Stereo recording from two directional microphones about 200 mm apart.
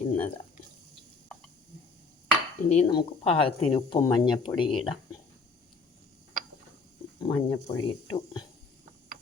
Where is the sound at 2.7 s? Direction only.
25° left (ahead or behind).